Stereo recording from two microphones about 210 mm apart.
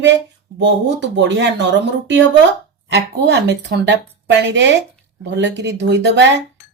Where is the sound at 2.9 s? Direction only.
55° right (ahead or behind).